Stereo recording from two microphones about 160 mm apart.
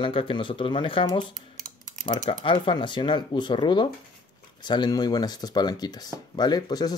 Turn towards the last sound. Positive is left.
turn(degrees=25)  # may be behind; listen again after turning